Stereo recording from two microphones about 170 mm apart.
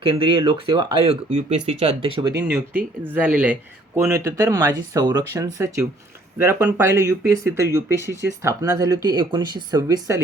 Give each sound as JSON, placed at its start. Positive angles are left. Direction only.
{"t": 0.0, "sound": "speech", "side_deg": -30}
{"t": 2.4, "sound": "speech", "side_deg": -10}